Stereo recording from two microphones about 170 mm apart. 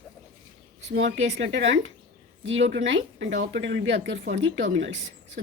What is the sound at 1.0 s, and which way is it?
A woman's voice, 90° right.